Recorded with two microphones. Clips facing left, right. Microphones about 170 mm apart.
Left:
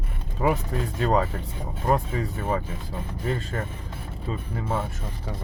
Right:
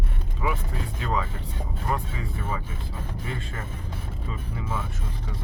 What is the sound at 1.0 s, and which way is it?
Speech, 45° left (ahead or behind).